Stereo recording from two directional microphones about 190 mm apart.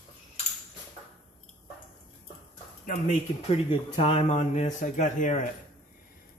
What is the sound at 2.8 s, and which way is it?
Speech, 35° left (ahead or behind).